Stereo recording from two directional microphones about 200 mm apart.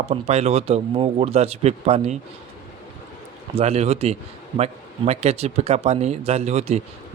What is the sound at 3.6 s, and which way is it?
Speech, 30° right (ahead or behind).